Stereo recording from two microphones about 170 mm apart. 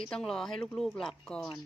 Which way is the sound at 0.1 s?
5° left (ahead or behind).